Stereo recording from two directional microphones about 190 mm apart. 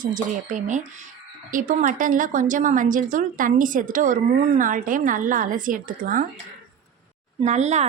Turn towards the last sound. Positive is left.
turn(degrees=-35)  # may be behind; listen again after turning